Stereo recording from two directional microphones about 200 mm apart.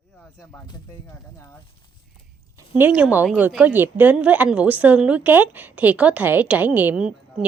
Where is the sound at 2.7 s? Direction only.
5° right (ahead or behind).